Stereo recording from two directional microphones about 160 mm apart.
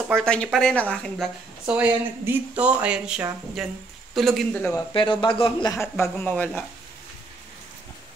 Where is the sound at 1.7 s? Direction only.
10° right (ahead or behind).